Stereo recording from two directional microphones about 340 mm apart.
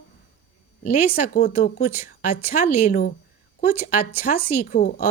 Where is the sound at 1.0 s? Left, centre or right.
Left.